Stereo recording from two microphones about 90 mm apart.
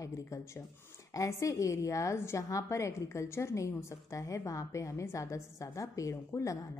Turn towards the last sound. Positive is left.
turn(degrees=35)  # may be behind; listen again after turning